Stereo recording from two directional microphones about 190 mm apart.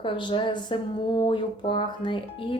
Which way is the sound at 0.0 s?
25° left (ahead or behind).